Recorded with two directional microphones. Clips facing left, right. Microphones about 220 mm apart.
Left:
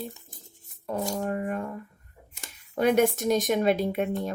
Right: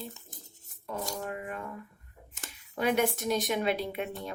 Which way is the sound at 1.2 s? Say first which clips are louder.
Left 8 dB; 45° left (ahead or behind).